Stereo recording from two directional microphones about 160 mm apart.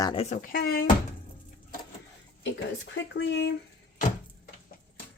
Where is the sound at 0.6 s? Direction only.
70° left (ahead or behind).